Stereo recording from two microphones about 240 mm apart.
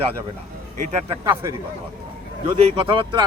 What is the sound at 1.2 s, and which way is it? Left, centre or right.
Speech, centre.